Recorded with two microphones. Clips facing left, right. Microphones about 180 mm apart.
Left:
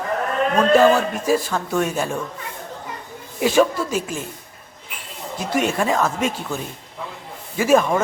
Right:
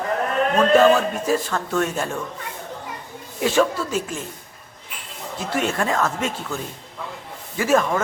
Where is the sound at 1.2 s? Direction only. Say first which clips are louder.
Left 2 dB; 10° left (ahead or behind).